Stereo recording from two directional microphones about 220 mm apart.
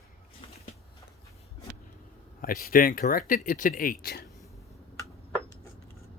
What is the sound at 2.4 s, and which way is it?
Speech, 40° left (ahead or behind).